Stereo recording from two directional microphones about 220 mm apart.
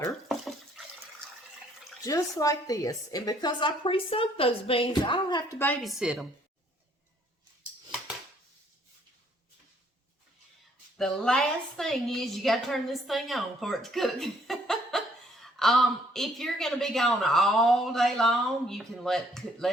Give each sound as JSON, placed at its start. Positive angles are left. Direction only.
{"t": 2.0, "sound": "a woman's voice", "side_deg": 15}
{"t": 5.8, "sound": "a woman's voice", "side_deg": 0}
{"t": 10.9, "sound": "a woman's voice", "side_deg": 5}